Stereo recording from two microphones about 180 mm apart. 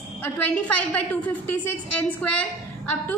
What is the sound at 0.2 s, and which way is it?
A woman's voice, 10° left (ahead or behind).